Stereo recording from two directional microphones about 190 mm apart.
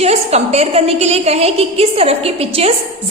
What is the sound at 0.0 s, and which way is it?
A woman's voice, 35° right (ahead or behind).